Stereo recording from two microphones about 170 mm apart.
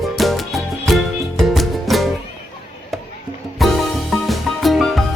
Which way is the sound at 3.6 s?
Centre (ahead or behind).